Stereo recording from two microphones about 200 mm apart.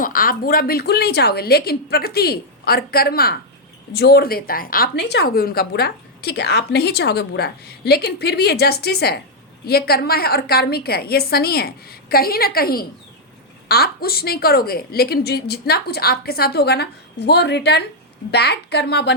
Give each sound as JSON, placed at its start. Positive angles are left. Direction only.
{"t": 0.0, "sound": "a woman's voice", "side_deg": 45}